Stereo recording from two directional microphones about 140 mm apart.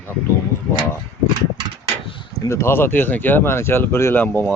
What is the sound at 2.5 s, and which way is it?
Speech, 20° left (ahead or behind).